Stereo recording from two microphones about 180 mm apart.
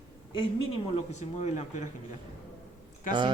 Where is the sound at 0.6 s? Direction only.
35° left (ahead or behind).